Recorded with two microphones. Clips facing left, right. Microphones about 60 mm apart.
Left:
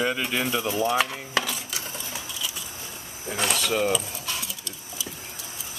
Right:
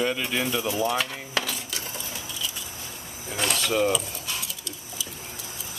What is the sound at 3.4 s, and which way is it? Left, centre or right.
Mechanisms, centre.